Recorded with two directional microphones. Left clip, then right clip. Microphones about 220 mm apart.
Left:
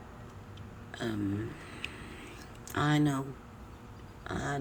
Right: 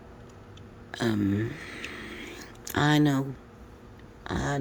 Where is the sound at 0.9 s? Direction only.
45° right (ahead or behind).